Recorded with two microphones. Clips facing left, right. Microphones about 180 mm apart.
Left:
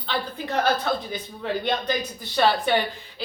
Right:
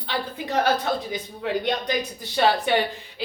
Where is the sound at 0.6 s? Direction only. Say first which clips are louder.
Even; 15° right (ahead or behind).